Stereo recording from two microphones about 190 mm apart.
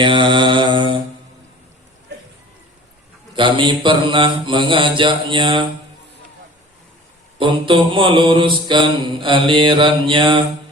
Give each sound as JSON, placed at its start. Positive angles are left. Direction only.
{"t": 0.0, "sound": "mantra", "side_deg": -25}
{"t": 3.3, "sound": "mantra", "side_deg": -25}
{"t": 7.3, "sound": "mantra", "side_deg": -25}